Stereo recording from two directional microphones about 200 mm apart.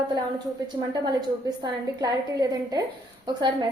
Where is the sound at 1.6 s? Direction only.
20° right (ahead or behind).